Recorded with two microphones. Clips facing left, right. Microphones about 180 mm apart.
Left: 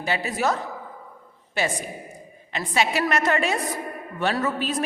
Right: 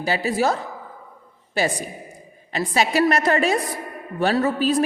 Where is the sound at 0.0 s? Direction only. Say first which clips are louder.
Right 4 dB; 35° right (ahead or behind).